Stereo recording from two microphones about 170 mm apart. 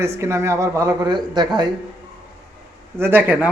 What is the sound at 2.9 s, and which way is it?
Speech, 10° right (ahead or behind).